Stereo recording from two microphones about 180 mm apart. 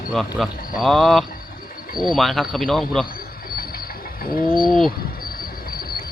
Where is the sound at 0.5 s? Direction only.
55° left (ahead or behind).